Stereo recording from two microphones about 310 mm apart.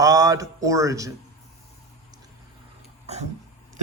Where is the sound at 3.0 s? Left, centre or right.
Right.